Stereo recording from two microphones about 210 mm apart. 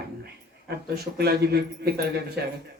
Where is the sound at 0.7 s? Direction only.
50° right (ahead or behind).